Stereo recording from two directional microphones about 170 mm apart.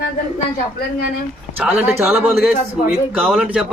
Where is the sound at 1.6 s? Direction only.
5° right (ahead or behind).